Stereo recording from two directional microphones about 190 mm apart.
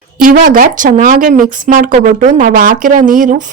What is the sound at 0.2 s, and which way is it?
Speech, 45° right (ahead or behind).